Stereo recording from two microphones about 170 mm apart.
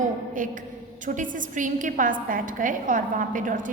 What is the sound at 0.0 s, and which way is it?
A woman's voice, 50° right (ahead or behind).